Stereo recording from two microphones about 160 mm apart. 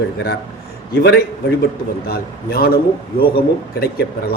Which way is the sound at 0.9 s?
90° left.